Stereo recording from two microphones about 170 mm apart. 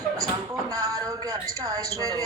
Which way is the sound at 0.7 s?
20° right (ahead or behind).